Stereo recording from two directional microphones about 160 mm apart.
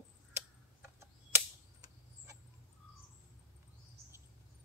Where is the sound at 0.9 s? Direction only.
20° right (ahead or behind).